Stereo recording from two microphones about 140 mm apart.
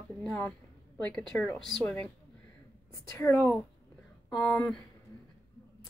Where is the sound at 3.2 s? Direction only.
10° left (ahead or behind).